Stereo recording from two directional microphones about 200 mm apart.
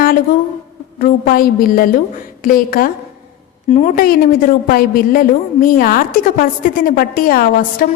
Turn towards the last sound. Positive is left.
turn(degrees=45)  # may be behind; listen again after turning